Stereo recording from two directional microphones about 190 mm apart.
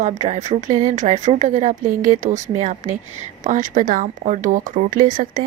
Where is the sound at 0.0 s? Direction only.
40° right (ahead or behind).